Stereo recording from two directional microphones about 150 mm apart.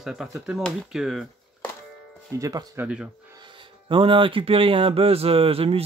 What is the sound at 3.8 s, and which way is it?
Speech, 35° right (ahead or behind).